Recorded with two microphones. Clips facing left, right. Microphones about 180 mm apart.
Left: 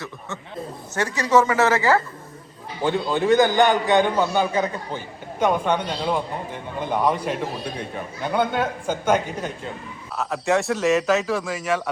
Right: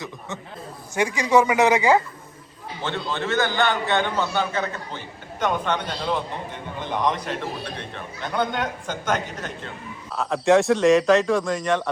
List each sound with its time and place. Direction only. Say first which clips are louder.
0.9 s speech: even; 10° right (ahead or behind)
2.8 s a man's voice: left 7 dB; 15° left (ahead or behind)